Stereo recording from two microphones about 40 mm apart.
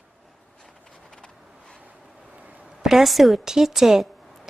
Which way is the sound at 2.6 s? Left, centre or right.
Centre.